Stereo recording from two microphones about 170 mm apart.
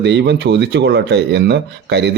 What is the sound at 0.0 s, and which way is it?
Speech, 90° right.